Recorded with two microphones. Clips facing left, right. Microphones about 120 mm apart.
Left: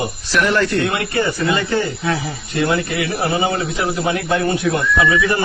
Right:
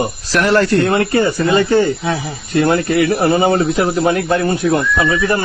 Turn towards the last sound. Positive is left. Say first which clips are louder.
# right 1 dB
turn(degrees=-35)  # may be behind; listen again after turning